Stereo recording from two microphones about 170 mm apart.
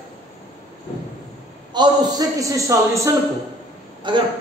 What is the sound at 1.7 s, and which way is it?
A man's voice, 25° right (ahead or behind).